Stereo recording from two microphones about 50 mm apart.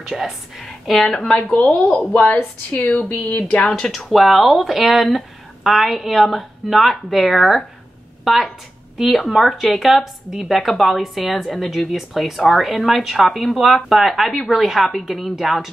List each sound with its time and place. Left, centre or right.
0.0 s a woman's voice: centre
2.7 s speech: left
3.6 s a woman's voice: centre